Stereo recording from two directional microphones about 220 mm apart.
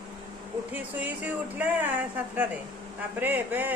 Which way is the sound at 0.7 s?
10° right (ahead or behind).